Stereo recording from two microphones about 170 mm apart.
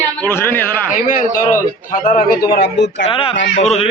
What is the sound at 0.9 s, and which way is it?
A man's voice, 50° left (ahead or behind).